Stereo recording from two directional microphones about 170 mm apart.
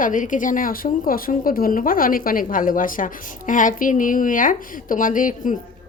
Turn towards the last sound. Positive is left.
turn(degrees=50)  # may be behind; listen again after turning